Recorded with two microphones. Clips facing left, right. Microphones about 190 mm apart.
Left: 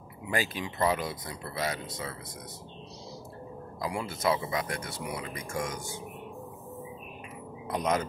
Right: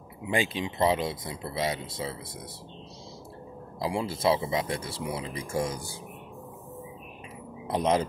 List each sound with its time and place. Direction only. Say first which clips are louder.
0.3 s speech: right 3 dB; 25° right (ahead or behind)
3.8 s speech: right 4 dB; 30° right (ahead or behind)
7.6 s speech: right 4 dB; 30° right (ahead or behind)